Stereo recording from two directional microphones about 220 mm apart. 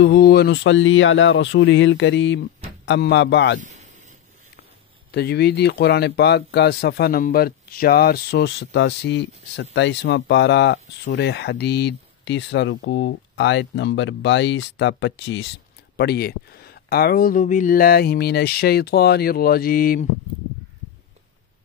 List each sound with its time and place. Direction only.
0.0 s speech: 45° left (ahead or behind)
5.1 s speech: 45° left (ahead or behind)